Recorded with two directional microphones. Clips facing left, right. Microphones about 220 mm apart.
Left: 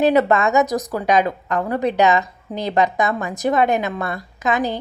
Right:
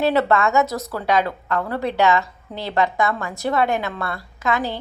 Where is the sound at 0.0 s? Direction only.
15° left (ahead or behind).